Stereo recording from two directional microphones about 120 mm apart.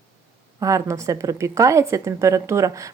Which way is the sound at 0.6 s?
25° right (ahead or behind).